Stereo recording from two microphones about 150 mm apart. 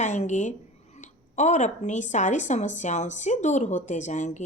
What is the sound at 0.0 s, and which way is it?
A woman's voice, 50° left (ahead or behind).